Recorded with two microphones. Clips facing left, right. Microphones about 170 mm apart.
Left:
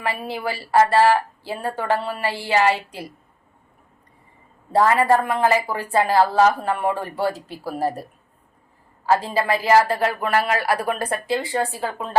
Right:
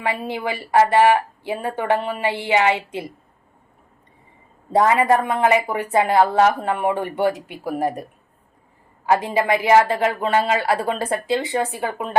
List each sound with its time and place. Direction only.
0.0 s speech: 20° right (ahead or behind)
4.7 s speech: 20° right (ahead or behind)
9.0 s speech: 20° right (ahead or behind)